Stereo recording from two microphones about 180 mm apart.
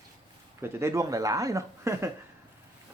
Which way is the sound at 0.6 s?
15° right (ahead or behind).